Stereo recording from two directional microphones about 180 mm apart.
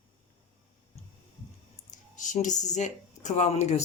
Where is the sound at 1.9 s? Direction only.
45° left (ahead or behind).